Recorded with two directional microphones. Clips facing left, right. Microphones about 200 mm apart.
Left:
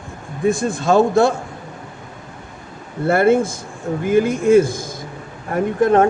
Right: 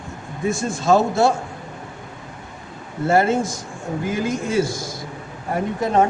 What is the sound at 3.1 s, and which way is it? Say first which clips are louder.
A man's voice: left 4 dB; 55° left (ahead or behind).